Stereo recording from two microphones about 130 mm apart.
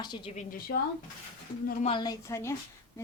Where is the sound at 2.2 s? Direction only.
25° left (ahead or behind).